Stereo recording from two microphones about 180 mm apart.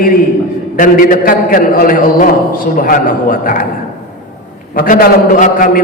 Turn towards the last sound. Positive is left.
turn(degrees=50)  # may be behind; listen again after turning